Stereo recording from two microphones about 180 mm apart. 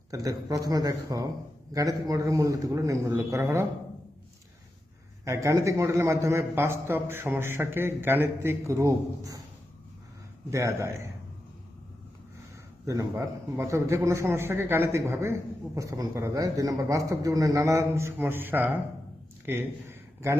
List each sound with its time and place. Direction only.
0.1 s a man's voice: 20° right (ahead or behind)
5.2 s a man's voice: 15° right (ahead or behind)
10.5 s a man's voice: 15° right (ahead or behind)
12.8 s a man's voice: 15° right (ahead or behind)